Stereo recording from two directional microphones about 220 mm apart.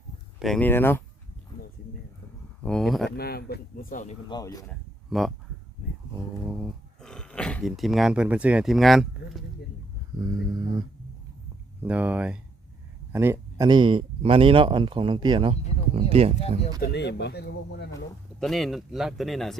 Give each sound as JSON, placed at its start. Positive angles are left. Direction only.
{"t": 0.3, "sound": "speech", "side_deg": 0}
{"t": 2.6, "sound": "speech", "side_deg": 0}
{"t": 3.2, "sound": "speech", "side_deg": 45}
{"t": 4.3, "sound": "speech", "side_deg": 15}
{"t": 4.7, "sound": "a sound", "side_deg": 0}
{"t": 6.4, "sound": "speech", "side_deg": 0}
{"t": 10.2, "sound": "mantra", "side_deg": -20}
{"t": 11.8, "sound": "speech", "side_deg": -5}
{"t": 16.8, "sound": "speech", "side_deg": 50}
{"t": 18.3, "sound": "speech", "side_deg": 0}